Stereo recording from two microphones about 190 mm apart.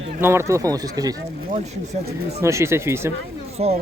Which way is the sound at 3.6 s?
35° right (ahead or behind).